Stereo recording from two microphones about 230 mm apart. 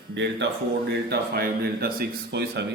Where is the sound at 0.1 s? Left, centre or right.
Right.